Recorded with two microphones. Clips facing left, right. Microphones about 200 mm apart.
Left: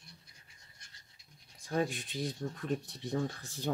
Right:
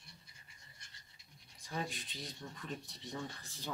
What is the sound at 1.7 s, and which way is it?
Speech, 50° left (ahead or behind).